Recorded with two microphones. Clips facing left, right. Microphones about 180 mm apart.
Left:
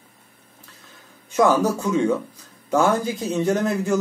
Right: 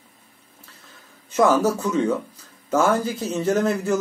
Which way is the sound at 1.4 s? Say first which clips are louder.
Even; 15° left (ahead or behind).